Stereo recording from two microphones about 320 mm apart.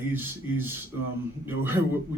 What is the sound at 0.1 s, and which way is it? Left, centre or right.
Speech, centre.